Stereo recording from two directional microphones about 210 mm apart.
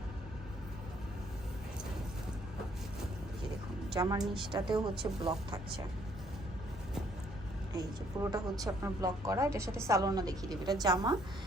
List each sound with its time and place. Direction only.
3.9 s a woman's voice: 15° right (ahead or behind)
7.7 s a woman's voice: 15° right (ahead or behind)